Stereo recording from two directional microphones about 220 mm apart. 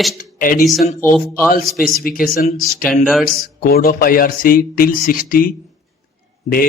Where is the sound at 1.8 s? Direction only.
40° left (ahead or behind).